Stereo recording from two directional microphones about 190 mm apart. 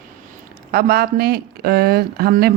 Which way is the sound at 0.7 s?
55° right (ahead or behind).